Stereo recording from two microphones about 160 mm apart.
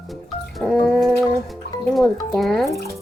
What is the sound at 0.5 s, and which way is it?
Speech, centre (ahead or behind).